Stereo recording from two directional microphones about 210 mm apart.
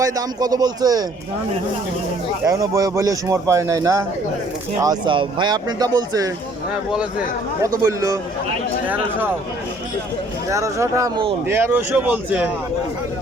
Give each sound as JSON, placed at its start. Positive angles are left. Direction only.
{"t": 0.0, "sound": "speech", "side_deg": -15}
{"t": 2.4, "sound": "speech", "side_deg": -15}
{"t": 7.8, "sound": "speech", "side_deg": -15}
{"t": 10.5, "sound": "speech", "side_deg": -15}